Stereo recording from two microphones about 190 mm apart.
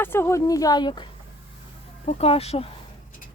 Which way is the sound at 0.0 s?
10° left (ahead or behind).